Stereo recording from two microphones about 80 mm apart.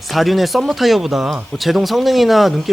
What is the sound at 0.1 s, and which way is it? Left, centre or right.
Speech, centre.